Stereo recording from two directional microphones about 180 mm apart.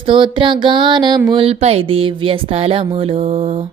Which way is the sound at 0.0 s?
30° right (ahead or behind).